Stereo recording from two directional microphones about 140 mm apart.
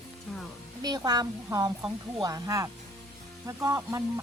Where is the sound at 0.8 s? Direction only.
30° right (ahead or behind).